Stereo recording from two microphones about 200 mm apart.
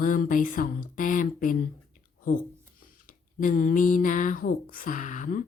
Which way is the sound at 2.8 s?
40° left (ahead or behind).